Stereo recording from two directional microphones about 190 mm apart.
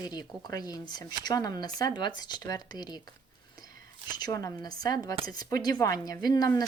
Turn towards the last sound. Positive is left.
turn(degrees=20)  # may be behind; listen again after turning